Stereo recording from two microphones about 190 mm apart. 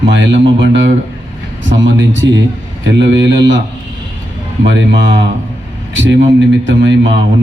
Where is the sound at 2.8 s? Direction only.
70° right (ahead or behind).